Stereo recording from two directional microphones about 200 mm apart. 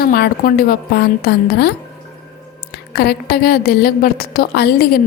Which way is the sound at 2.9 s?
50° left (ahead or behind).